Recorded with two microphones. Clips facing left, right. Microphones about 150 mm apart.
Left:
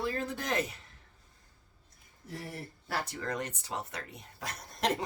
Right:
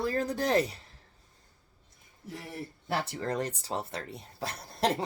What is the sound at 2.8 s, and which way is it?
Speech, 25° right (ahead or behind).